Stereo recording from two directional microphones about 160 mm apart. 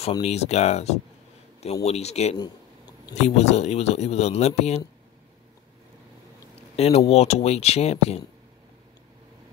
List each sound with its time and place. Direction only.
0.2 s speech: 40° left (ahead or behind)
2.3 s a sound: 25° left (ahead or behind)
3.2 s speech: 45° left (ahead or behind)
6.5 s speech: 40° left (ahead or behind)